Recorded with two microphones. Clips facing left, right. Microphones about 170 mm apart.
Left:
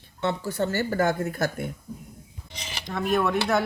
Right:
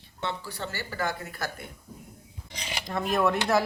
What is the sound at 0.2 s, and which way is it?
Speech, 45° left (ahead or behind).